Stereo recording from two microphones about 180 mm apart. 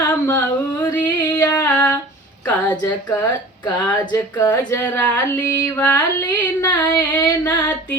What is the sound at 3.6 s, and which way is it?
Music, 25° left (ahead or behind).